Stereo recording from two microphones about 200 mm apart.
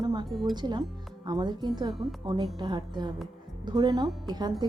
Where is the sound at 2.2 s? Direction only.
20° right (ahead or behind).